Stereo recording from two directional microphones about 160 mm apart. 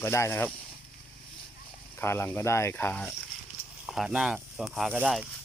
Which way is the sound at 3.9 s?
Centre (ahead or behind).